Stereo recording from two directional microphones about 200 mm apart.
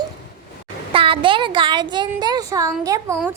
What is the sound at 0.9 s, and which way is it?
Speech, 25° right (ahead or behind).